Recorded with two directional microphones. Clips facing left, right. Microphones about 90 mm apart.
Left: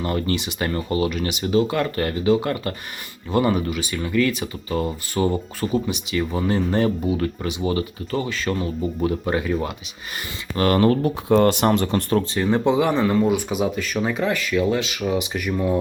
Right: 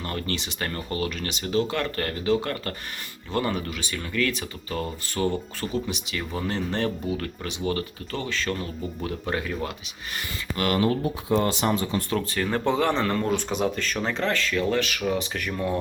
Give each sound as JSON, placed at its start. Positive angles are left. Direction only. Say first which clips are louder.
{"t": 0.0, "sound": "speech", "louder": "left 7 dB", "side_deg": 10}
{"t": 10.6, "sound": "speech", "louder": "left 6 dB", "side_deg": 40}
{"t": 10.8, "sound": "speech", "louder": "left 6 dB", "side_deg": 60}
{"t": 12.3, "sound": "speech", "louder": "left 4 dB", "side_deg": 20}